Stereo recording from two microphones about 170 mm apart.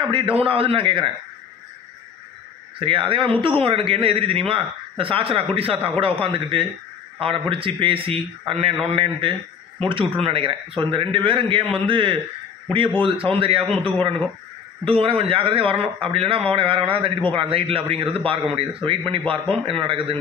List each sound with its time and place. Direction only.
0.1 s a man's voice: 30° right (ahead or behind)
2.8 s a man's voice: 30° right (ahead or behind)